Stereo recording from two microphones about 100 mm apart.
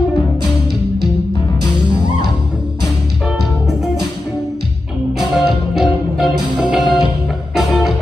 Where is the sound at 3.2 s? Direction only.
Centre (ahead or behind).